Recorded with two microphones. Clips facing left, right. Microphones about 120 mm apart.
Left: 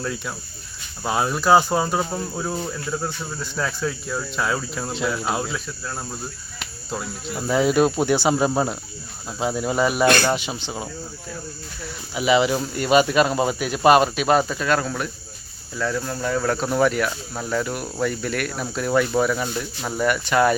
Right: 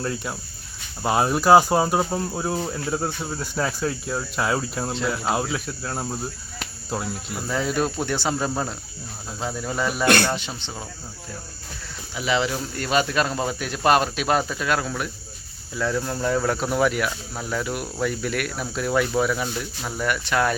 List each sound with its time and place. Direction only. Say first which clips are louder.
1.0 s speech: right 2 dB; 5° right (ahead or behind)
2.6 s speech: right 1 dB; 20° right (ahead or behind)
3.5 s speech: even; 10° right (ahead or behind)
7.4 s cricket: left 6 dB; 15° left (ahead or behind)
12.1 s cricket: left 5 dB; 10° left (ahead or behind)
12.7 s speech: left 5 dB; 10° left (ahead or behind)